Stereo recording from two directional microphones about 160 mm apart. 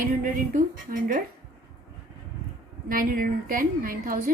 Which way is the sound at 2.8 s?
60° right (ahead or behind).